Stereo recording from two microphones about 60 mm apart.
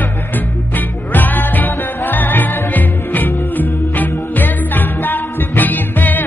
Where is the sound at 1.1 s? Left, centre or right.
Left.